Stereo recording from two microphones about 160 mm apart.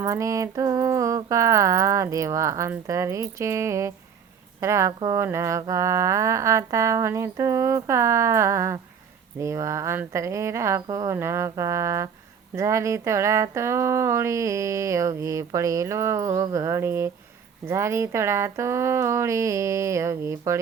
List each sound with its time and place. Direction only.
0.0 s speech: 20° right (ahead or behind)